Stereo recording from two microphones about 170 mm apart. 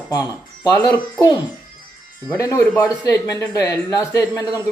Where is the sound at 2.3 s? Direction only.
20° left (ahead or behind).